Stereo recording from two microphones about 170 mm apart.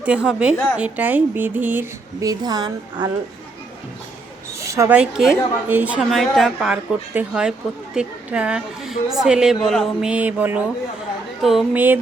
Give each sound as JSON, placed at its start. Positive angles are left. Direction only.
{"t": 0.0, "sound": "speech", "side_deg": -5}
{"t": 0.5, "sound": "a woman's voice", "side_deg": 10}
{"t": 0.8, "sound": "speech", "side_deg": -10}
{"t": 4.6, "sound": "a woman's voice", "side_deg": -15}
{"t": 4.9, "sound": "a woman's voice", "side_deg": -5}